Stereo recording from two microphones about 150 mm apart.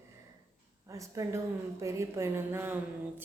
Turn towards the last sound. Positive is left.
turn(degrees=-15)  # may be behind; listen again after turning